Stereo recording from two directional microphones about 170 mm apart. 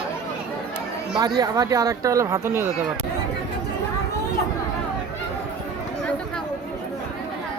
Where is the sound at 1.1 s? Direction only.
25° right (ahead or behind).